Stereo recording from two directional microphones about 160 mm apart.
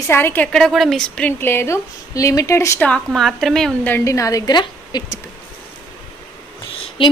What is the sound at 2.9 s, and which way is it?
A woman's voice, centre (ahead or behind).